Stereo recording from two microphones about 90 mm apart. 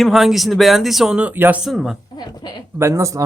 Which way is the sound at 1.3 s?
20° right (ahead or behind).